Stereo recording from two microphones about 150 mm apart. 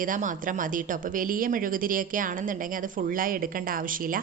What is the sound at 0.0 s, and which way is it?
A woman's voice, 60° right (ahead or behind).